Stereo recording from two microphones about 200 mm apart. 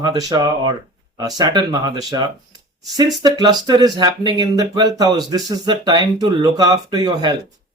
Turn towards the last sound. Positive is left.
turn(degrees=-20)  # may be behind; listen again after turning